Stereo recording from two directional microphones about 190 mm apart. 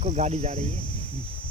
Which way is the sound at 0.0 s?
35° right (ahead or behind).